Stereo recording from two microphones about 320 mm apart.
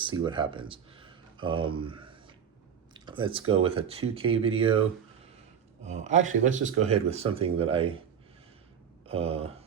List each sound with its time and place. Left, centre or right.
0.0 s speech: centre
2.9 s a sound: centre
3.5 s speech: centre
5.8 s speech: right
9.0 s speech: centre